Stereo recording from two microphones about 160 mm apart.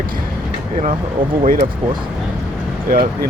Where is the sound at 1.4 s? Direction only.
55° right (ahead or behind).